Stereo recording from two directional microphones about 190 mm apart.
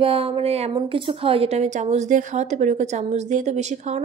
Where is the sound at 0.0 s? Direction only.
30° right (ahead or behind).